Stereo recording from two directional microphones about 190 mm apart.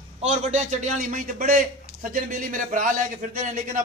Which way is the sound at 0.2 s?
35° right (ahead or behind).